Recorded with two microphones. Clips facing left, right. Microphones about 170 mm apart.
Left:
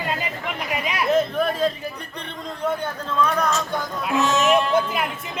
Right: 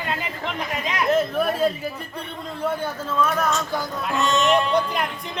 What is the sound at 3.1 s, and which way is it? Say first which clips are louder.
Speech: left 1 dB; 5° right (ahead or behind).